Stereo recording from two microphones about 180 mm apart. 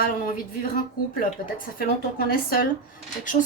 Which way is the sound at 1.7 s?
55° left (ahead or behind).